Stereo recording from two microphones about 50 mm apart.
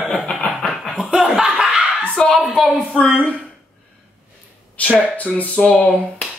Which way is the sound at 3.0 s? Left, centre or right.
Left.